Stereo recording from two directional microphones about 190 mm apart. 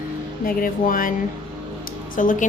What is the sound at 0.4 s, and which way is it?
Speech, 45° left (ahead or behind).